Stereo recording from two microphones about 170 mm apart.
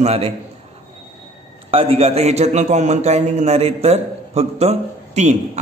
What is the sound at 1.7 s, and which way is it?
A man's voice, 35° right (ahead or behind).